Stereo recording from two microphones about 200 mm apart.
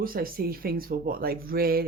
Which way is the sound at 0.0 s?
45° right (ahead or behind).